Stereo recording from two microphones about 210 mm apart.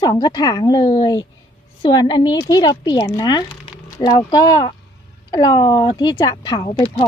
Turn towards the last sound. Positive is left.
turn(degrees=25)  # may be behind; listen again after turning